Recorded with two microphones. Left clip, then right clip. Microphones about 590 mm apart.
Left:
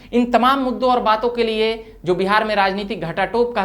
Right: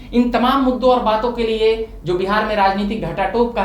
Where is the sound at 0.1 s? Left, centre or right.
Left.